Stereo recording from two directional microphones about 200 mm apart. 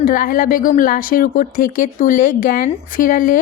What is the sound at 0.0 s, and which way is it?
Speech, 45° left (ahead or behind).